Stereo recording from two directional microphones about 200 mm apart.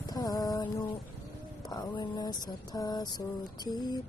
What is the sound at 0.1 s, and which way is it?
Music, 20° left (ahead or behind).